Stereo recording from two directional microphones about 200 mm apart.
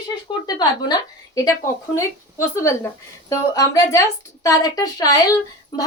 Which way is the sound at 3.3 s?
15° left (ahead or behind).